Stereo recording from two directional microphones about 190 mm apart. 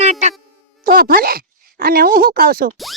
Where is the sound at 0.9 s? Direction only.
50° right (ahead or behind).